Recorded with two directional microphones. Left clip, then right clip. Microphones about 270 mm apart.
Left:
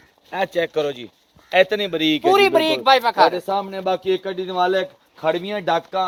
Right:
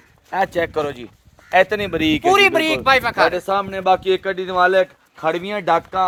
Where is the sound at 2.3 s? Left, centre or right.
Right.